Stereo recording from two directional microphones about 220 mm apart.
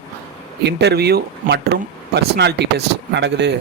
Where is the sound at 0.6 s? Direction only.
50° right (ahead or behind).